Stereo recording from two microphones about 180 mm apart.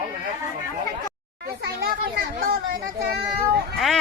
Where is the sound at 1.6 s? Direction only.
55° right (ahead or behind).